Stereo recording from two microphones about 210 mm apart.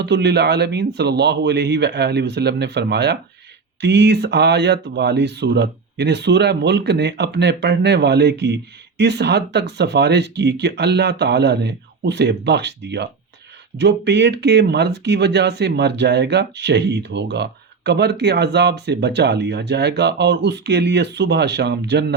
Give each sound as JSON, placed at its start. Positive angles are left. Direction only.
{"t": 0.0, "sound": "speech", "side_deg": -55}